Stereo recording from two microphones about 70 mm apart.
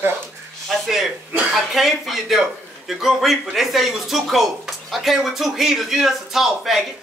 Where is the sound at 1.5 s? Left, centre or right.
Centre.